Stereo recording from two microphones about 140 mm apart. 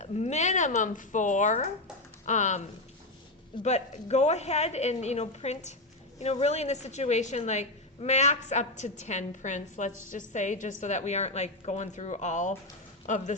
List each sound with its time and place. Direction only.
0.0 s a woman's voice: 55° left (ahead or behind)